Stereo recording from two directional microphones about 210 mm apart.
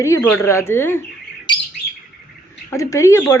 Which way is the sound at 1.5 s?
20° left (ahead or behind).